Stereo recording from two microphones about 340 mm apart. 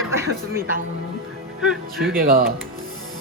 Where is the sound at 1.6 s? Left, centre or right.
Centre.